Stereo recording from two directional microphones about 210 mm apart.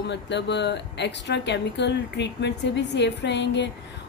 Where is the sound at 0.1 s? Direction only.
55° left (ahead or behind).